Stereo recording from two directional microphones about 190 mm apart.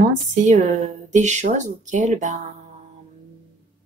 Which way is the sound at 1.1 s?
40° right (ahead or behind).